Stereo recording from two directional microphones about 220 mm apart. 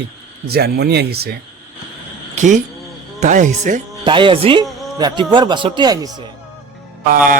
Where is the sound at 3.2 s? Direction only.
35° right (ahead or behind).